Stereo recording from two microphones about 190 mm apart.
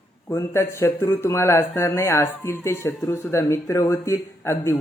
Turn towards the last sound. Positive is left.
turn(degrees=15)  # may be behind; listen again after turning